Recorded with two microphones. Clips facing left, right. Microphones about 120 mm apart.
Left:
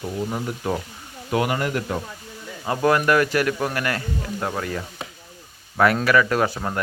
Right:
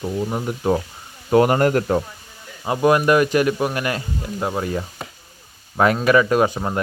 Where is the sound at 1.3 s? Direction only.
40° right (ahead or behind).